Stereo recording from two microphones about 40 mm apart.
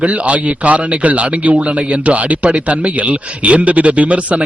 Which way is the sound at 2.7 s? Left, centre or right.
Right.